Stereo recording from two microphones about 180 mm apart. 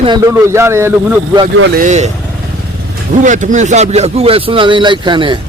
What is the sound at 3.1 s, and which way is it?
Speech, 45° right (ahead or behind).